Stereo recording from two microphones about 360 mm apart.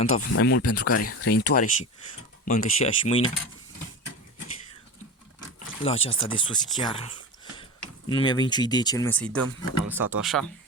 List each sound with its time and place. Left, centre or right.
0.0 s speech: left
0.6 s speech: left
1.0 s speech: left
5.5 s speech: centre
8.1 s speech: centre